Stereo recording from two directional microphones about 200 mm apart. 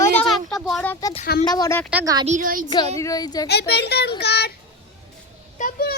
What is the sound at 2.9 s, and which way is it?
Speech, 15° left (ahead or behind).